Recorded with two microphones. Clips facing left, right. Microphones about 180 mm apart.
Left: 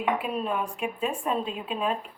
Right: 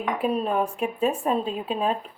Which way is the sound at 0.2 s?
40° right (ahead or behind).